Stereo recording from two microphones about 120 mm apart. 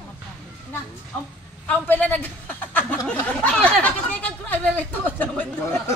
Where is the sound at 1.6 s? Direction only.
15° left (ahead or behind).